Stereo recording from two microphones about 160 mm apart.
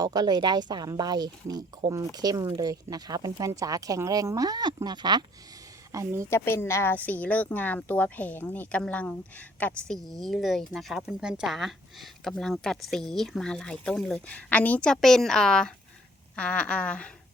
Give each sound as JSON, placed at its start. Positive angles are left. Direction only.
{"t": 0.0, "sound": "speech", "side_deg": -25}
{"t": 6.3, "sound": "speech", "side_deg": 15}